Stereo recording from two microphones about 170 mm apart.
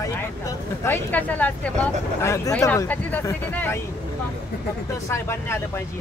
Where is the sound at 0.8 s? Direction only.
10° left (ahead or behind).